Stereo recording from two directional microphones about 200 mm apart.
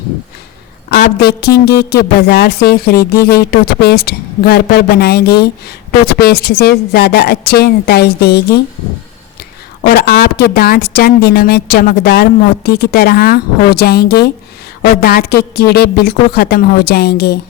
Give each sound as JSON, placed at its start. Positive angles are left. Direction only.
{"t": 0.9, "sound": "a woman's voice", "side_deg": 50}
{"t": 9.9, "sound": "a woman's voice", "side_deg": 50}